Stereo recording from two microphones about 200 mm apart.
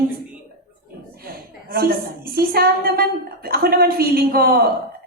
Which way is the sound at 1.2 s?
50° right (ahead or behind).